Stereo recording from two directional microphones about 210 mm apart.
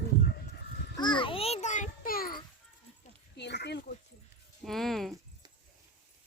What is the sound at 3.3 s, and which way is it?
Speech, 55° left (ahead or behind).